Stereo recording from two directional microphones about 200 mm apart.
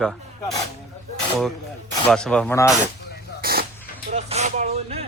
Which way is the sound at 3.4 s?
50° right (ahead or behind).